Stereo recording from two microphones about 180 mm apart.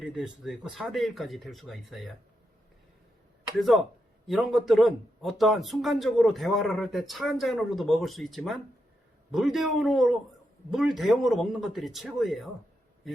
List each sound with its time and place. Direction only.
0.0 s speech: centre (ahead or behind)
3.6 s speech: centre (ahead or behind)